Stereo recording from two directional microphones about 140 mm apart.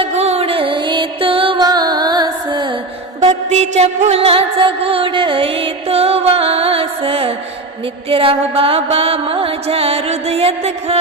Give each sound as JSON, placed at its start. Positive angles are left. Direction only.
{"t": 0.0, "sound": "music", "side_deg": -50}
{"t": 3.2, "sound": "music", "side_deg": -50}